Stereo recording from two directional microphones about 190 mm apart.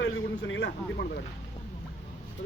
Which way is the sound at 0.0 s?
80° left.